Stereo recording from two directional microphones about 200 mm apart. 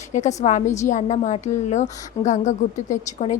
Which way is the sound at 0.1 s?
35° left (ahead or behind).